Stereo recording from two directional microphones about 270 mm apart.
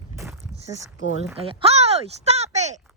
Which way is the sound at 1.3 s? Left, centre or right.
Right.